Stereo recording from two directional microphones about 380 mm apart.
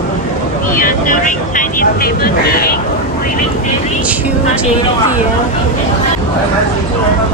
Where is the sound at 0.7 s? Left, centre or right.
Left.